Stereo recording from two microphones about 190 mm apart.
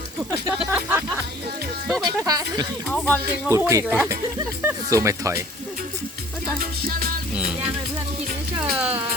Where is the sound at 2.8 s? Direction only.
10° left (ahead or behind).